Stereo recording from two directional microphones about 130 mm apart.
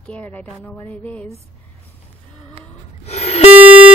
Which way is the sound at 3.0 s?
55° left (ahead or behind).